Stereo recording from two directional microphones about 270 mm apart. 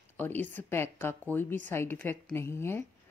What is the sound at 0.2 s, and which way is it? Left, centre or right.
Speech, centre.